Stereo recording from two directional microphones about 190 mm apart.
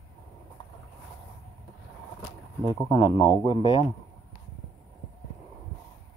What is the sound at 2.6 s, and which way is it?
Speech, 20° left (ahead or behind).